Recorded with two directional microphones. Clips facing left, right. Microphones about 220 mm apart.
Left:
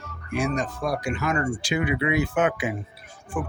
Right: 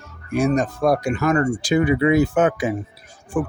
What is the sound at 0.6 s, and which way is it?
Speech, 55° right (ahead or behind).